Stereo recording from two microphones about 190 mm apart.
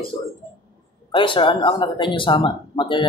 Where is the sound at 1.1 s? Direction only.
25° left (ahead or behind).